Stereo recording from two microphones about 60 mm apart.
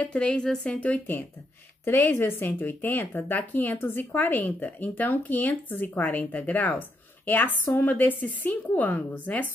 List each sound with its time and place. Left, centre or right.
0.0 s a woman's voice: centre
0.7 s speech: left
1.9 s speech: left